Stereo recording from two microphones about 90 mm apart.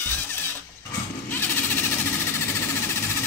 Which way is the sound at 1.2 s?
20° left (ahead or behind).